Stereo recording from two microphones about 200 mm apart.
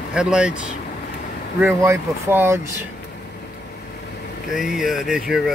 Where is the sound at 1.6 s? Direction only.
10° right (ahead or behind).